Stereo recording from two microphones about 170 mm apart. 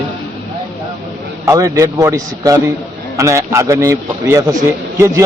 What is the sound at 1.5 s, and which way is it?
A man's voice, 20° right (ahead or behind).